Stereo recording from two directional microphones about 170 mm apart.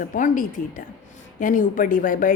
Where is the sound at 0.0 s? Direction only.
50° left (ahead or behind).